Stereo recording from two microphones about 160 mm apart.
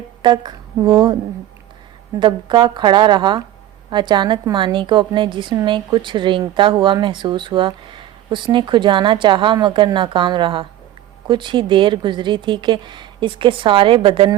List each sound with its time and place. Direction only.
0.2 s a woman's voice: 30° right (ahead or behind)
2.1 s a woman's voice: 30° right (ahead or behind)